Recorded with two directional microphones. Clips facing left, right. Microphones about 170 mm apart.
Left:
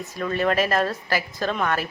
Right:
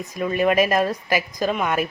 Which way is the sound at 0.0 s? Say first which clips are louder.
Right 3 dB; 15° right (ahead or behind).